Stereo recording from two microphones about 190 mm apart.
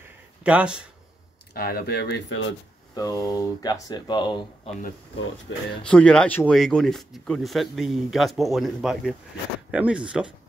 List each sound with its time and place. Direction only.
0.4 s speech: 5° right (ahead or behind)
1.5 s speech: 55° left (ahead or behind); by 2.4 s 70° left (ahead or behind)
2.9 s speech: 20° left (ahead or behind)
5.5 s speech: 75° left (ahead or behind)
5.9 s speech: 5° left (ahead or behind)